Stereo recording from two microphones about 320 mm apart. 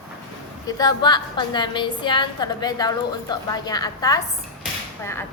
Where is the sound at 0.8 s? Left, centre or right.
Centre.